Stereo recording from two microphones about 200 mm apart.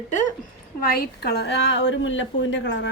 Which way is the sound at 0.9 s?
50° left (ahead or behind).